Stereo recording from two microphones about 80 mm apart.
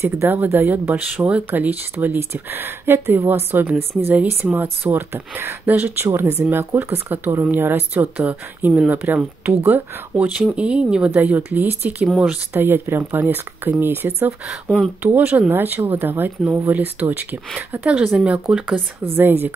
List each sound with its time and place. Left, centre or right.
0.0 s speech: right
10.1 s speech: centre
11.1 s speech: right
19.1 s speech: right